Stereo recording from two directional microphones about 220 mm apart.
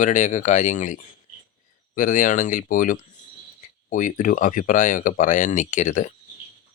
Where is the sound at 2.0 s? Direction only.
35° left (ahead or behind).